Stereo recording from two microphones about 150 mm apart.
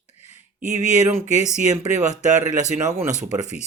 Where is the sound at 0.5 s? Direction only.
50° right (ahead or behind).